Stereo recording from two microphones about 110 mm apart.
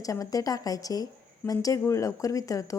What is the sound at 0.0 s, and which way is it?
Speech, 30° left (ahead or behind).